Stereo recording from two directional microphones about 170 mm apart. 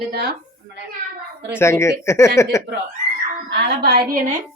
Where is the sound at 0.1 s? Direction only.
70° right (ahead or behind).